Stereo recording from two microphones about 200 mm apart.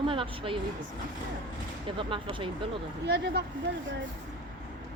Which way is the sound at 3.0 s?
55° right (ahead or behind).